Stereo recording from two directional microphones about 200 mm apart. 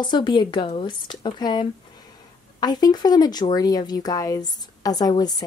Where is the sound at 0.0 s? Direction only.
20° left (ahead or behind).